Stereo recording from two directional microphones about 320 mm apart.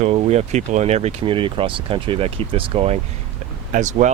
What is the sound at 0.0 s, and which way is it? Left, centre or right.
Speech, centre.